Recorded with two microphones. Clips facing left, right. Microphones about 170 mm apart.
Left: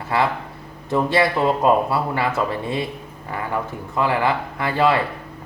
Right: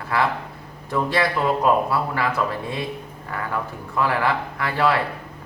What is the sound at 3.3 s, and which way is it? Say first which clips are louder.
Speech: left 2 dB; 20° left (ahead or behind).